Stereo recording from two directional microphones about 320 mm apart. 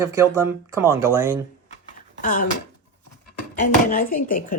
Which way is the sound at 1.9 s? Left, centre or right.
Left.